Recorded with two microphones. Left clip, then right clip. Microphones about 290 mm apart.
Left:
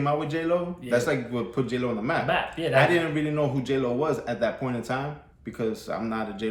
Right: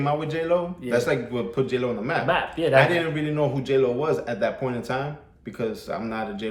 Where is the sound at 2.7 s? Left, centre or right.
Centre.